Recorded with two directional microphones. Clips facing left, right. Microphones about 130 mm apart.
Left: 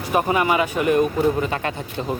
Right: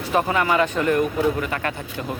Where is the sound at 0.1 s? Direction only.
10° left (ahead or behind).